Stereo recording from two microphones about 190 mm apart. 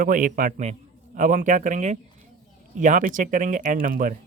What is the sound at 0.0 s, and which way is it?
Speech, 45° right (ahead or behind).